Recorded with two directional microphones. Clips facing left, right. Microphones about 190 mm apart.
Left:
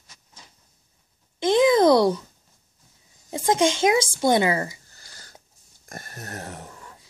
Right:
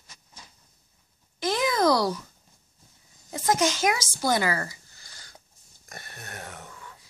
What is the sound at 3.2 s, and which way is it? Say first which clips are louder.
A child's voice: left 4 dB; 25° left (ahead or behind).